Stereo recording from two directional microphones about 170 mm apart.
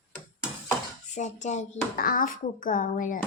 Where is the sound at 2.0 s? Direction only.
55° left (ahead or behind).